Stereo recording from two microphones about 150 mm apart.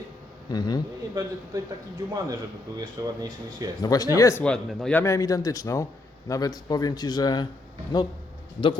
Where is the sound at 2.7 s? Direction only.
25° right (ahead or behind).